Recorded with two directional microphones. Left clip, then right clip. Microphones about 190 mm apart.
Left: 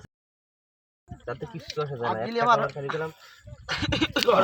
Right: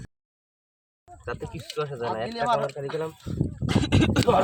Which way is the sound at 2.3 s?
20° left (ahead or behind).